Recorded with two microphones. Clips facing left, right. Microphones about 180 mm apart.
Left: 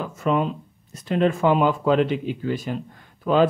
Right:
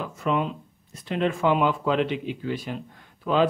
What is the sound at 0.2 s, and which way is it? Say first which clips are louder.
A man's voice: left 3 dB; 40° left (ahead or behind).